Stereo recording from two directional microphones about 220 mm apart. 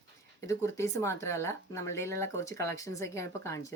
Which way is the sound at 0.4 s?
15° left (ahead or behind).